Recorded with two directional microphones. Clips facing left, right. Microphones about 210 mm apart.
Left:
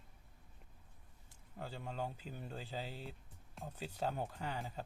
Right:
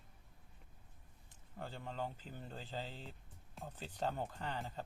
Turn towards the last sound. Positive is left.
turn(degrees=5)  # may be behind; listen again after turning